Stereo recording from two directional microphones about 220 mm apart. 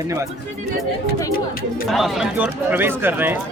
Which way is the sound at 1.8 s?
Centre (ahead or behind).